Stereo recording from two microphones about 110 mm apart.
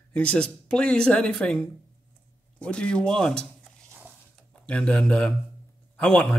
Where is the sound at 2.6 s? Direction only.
10° left (ahead or behind).